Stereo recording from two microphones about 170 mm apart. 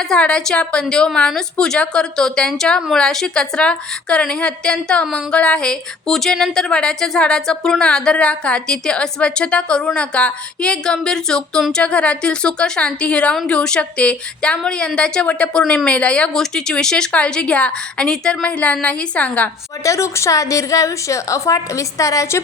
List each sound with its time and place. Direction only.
0.0 s a woman's voice: 5° left (ahead or behind)